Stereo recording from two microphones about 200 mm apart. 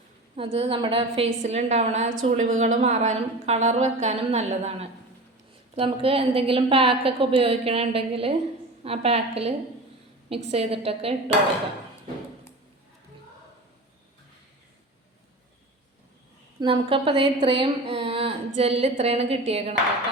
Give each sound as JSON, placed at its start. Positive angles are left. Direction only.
{"t": 0.3, "sound": "a woman's voice", "side_deg": -30}
{"t": 16.6, "sound": "a woman's voice", "side_deg": -25}